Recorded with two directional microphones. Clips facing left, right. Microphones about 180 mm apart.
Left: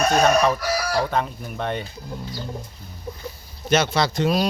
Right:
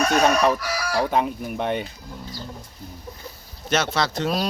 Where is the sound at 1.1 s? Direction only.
10° right (ahead or behind).